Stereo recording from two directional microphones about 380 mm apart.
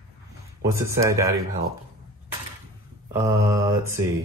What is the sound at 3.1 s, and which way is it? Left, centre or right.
Speech, centre.